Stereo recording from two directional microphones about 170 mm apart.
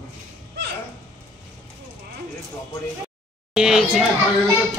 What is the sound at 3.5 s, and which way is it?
Speech, 5° right (ahead or behind).